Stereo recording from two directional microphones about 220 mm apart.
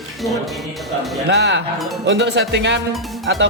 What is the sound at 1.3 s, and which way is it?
Speech, 50° right (ahead or behind).